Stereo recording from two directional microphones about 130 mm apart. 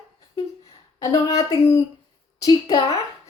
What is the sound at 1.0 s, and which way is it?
A woman's voice, 25° left (ahead or behind).